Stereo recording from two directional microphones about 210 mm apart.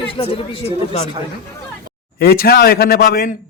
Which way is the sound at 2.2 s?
45° left (ahead or behind).